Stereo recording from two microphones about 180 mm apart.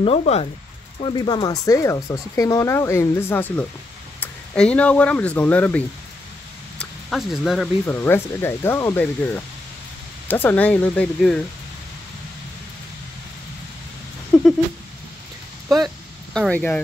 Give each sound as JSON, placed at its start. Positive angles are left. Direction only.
{"t": 0.0, "sound": "speech", "side_deg": 35}
{"t": 7.8, "sound": "speech", "side_deg": 10}
{"t": 14.3, "sound": "a sound", "side_deg": 5}
{"t": 16.3, "sound": "speech", "side_deg": 5}